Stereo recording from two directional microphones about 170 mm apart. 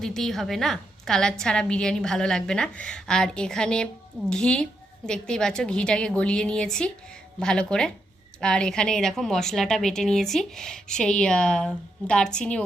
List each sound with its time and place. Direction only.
0.0 s a woman's voice: centre (ahead or behind)